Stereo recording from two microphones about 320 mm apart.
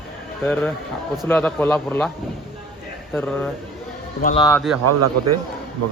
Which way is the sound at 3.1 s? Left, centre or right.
Centre.